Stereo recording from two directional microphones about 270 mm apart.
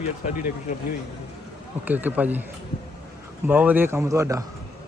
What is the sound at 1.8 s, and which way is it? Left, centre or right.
Speech, centre.